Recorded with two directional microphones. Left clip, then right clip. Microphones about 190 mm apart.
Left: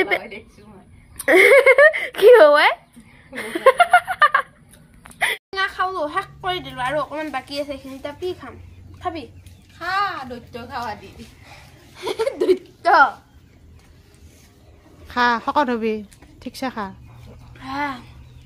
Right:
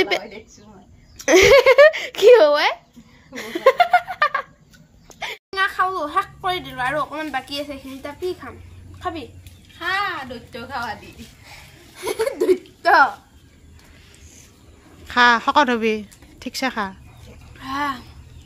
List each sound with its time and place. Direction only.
1.2 s speech: 15° right (ahead or behind)
3.3 s laughter: centre (ahead or behind)
5.5 s speech: 5° left (ahead or behind)
9.8 s a woman's voice: 65° left (ahead or behind); by 11.6 s 45° left (ahead or behind)
12.0 s a woman's voice: 10° right (ahead or behind)
15.0 s speech: centre (ahead or behind)
17.6 s a sound: centre (ahead or behind)